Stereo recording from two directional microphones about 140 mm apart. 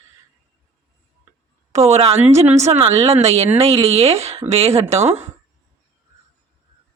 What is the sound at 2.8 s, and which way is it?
Speech, 50° right (ahead or behind).